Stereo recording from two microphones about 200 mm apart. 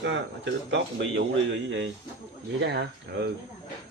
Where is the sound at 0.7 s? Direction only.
65° right (ahead or behind).